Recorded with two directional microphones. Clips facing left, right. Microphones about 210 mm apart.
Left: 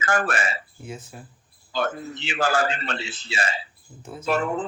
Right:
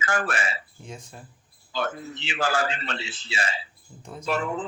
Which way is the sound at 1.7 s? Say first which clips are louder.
Left 3 dB; 45° left (ahead or behind).